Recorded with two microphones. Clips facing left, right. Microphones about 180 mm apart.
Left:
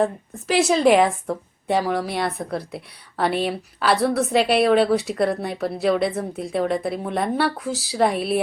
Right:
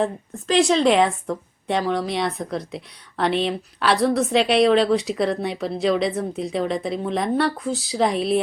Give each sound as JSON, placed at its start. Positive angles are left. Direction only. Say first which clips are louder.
{"t": 0.0, "sound": "a woman's voice", "louder": "left 2 dB", "side_deg": 5}